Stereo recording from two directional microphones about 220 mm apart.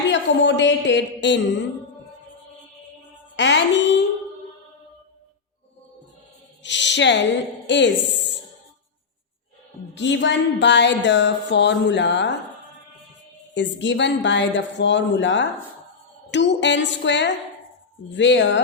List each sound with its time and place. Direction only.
0.1 s a sound: 55° left (ahead or behind)
3.3 s speech: 55° left (ahead or behind)
6.6 s speech: 55° left (ahead or behind)
9.9 s speech: 55° left (ahead or behind)
13.5 s speech: 55° left (ahead or behind)